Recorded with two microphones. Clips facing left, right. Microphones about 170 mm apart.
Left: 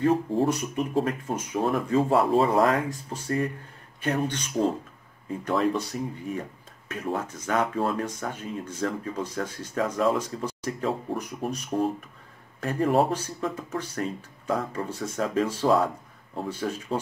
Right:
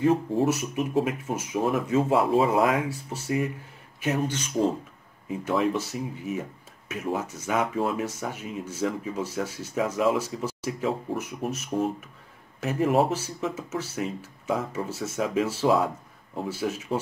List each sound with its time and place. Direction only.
0.0 s speech: centre (ahead or behind)